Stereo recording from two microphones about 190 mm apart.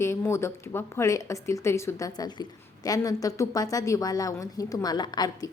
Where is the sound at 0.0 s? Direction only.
15° left (ahead or behind).